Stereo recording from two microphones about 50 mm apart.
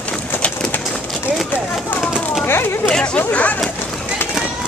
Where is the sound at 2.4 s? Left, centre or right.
Left.